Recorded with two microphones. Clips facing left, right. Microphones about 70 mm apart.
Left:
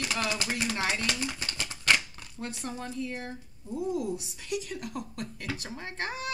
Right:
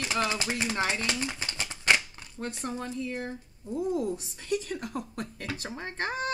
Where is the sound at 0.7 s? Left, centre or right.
Right.